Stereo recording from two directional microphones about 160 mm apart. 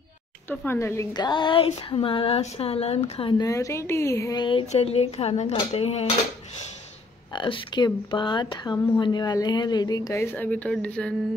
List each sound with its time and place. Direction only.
0.5 s speech: 15° left (ahead or behind); by 6.0 s 40° left (ahead or behind)
7.3 s speech: 30° left (ahead or behind); by 11.1 s 5° left (ahead or behind)